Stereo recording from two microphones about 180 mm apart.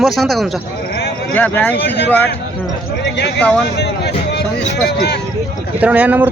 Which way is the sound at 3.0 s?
70° left (ahead or behind).